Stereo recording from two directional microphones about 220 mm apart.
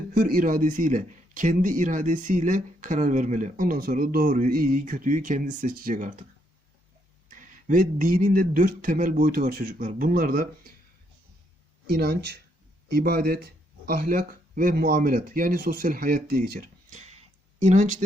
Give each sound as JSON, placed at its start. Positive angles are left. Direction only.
{"t": 0.1, "sound": "speech", "side_deg": -40}
{"t": 7.3, "sound": "speech", "side_deg": -35}
{"t": 11.9, "sound": "speech", "side_deg": -45}